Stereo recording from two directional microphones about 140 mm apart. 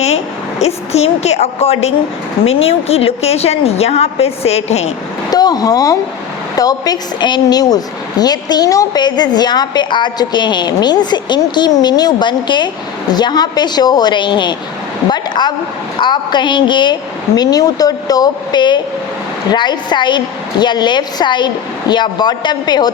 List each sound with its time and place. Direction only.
0.6 s a woman's voice: 50° left (ahead or behind)
5.3 s a woman's voice: 30° left (ahead or behind)